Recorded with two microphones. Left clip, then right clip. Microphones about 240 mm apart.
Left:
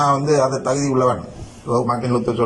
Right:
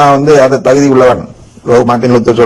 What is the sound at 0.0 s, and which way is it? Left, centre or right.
A man's voice, right.